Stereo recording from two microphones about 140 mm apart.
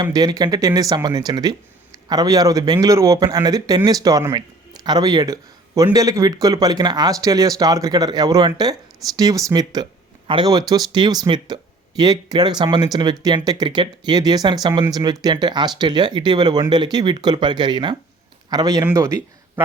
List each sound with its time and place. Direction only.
0.0 s speech: 30° right (ahead or behind)